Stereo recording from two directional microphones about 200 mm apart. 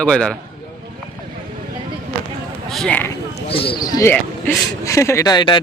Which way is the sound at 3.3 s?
30° left (ahead or behind).